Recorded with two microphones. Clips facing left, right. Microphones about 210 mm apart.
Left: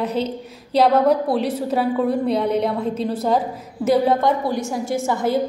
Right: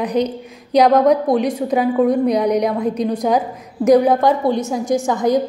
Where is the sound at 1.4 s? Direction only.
15° right (ahead or behind).